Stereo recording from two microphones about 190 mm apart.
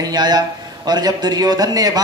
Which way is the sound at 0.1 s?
20° right (ahead or behind).